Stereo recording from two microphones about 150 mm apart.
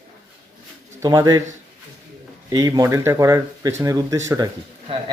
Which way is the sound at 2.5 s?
25° right (ahead or behind).